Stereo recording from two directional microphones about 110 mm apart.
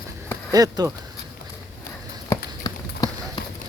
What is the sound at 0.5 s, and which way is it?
Speech, 35° right (ahead or behind).